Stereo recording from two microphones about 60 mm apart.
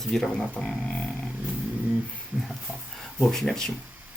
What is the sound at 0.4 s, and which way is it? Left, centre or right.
Speech, centre.